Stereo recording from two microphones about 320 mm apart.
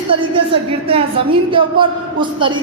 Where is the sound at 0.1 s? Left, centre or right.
Centre.